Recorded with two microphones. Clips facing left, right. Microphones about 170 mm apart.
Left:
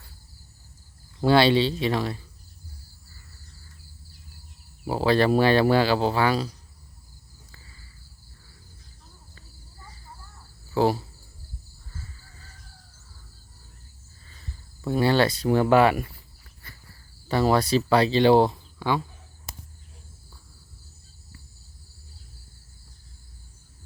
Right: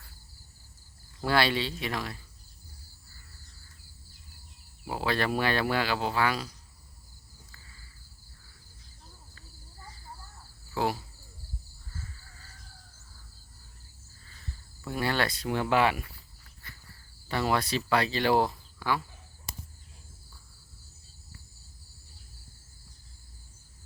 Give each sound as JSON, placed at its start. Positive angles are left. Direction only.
{"t": 1.2, "sound": "speech", "side_deg": 25}
{"t": 4.9, "sound": "speech", "side_deg": 30}
{"t": 14.8, "sound": "speech", "side_deg": 30}
{"t": 17.2, "sound": "speech", "side_deg": 35}